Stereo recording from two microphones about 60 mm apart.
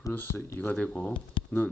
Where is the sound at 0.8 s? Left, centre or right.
Centre.